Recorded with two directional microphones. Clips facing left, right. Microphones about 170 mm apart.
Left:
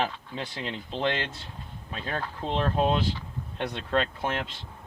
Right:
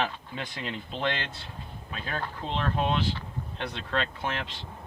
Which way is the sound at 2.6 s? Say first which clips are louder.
Left 3 dB; 35° left (ahead or behind).